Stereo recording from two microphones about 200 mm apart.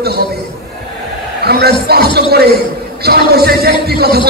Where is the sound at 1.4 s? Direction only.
50° right (ahead or behind).